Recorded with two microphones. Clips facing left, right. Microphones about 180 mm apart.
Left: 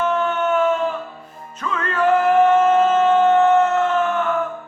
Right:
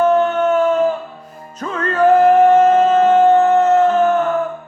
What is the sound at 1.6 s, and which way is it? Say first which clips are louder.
Music: right 5 dB; 40° right (ahead or behind).